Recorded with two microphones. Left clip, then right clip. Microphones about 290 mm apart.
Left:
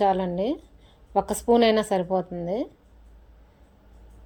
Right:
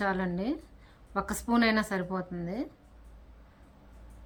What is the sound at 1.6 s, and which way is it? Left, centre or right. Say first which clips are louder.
Speech: left 7 dB; centre.